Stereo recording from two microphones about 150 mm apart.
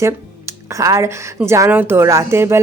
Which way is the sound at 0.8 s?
20° right (ahead or behind).